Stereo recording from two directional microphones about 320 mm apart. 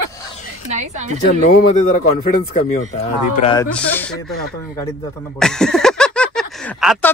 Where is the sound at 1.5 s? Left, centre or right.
Left.